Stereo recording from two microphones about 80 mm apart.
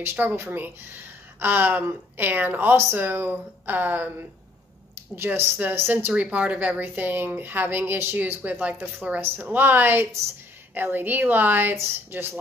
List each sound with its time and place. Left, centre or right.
0.0 s a woman's voice: right